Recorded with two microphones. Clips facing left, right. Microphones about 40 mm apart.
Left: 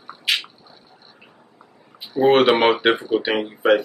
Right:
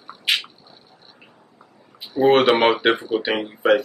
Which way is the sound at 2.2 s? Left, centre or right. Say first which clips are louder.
Even; centre.